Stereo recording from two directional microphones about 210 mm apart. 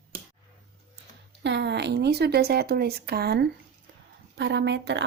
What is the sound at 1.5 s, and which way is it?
A woman's voice, 55° right (ahead or behind).